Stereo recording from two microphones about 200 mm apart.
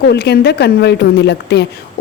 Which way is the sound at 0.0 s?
55° left (ahead or behind).